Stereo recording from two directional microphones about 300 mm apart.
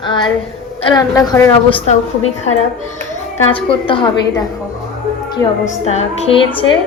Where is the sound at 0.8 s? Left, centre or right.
Centre.